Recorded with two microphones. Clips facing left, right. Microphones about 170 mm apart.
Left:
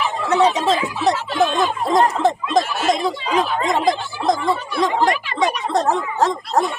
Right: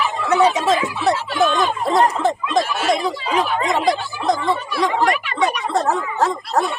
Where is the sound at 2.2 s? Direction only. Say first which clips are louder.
Left 1 dB; 40° left (ahead or behind).